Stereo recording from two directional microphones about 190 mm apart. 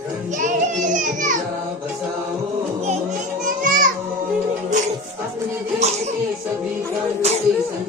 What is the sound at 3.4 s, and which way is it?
Children playing, 45° right (ahead or behind).